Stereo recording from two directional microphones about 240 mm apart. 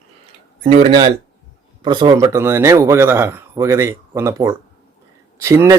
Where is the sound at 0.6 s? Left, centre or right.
Right.